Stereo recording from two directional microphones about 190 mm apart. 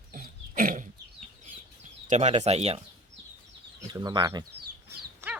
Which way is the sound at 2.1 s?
35° right (ahead or behind).